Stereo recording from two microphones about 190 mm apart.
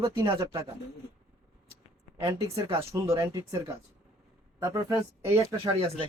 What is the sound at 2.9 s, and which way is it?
Speech, 15° right (ahead or behind).